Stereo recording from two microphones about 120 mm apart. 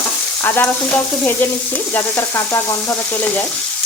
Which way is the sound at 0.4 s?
15° left (ahead or behind).